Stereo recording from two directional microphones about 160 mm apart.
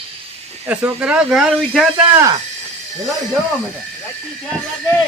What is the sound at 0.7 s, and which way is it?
Speech, 10° right (ahead or behind).